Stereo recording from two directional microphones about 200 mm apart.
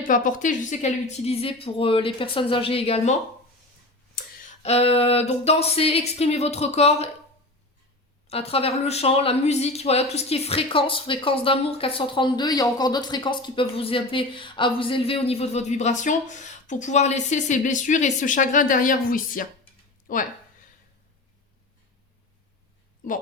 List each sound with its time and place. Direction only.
0.1 s speech: 40° left (ahead or behind)
4.6 s speech: 30° left (ahead or behind)
8.3 s speech: 30° left (ahead or behind)